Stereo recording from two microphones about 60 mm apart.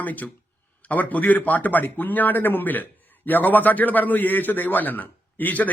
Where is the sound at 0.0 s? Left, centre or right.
Left.